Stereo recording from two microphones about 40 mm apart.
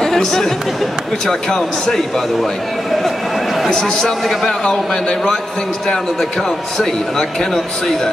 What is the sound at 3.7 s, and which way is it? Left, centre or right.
Speech, centre.